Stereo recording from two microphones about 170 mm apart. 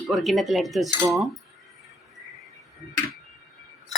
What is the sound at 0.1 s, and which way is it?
Speech, centre (ahead or behind).